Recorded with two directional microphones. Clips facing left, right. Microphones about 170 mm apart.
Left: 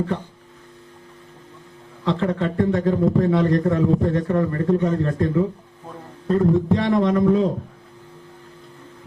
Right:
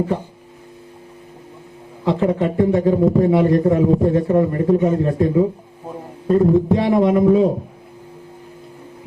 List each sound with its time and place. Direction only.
2.0 s a man's voice: 15° right (ahead or behind)
5.8 s a sound: 25° right (ahead or behind)
6.2 s a man's voice: 15° right (ahead or behind)